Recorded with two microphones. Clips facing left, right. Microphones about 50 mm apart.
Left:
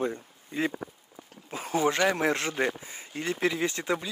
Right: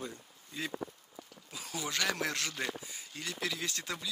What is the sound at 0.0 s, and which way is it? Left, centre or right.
Speech, left.